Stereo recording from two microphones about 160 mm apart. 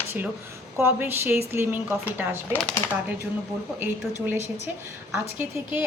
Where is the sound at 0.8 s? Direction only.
15° right (ahead or behind).